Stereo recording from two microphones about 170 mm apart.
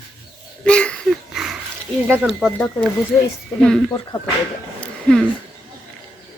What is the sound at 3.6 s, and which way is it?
Speech, 5° left (ahead or behind).